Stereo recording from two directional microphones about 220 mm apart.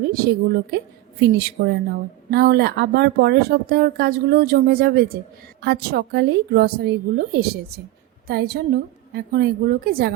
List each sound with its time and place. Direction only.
0.1 s speech: 45° right (ahead or behind)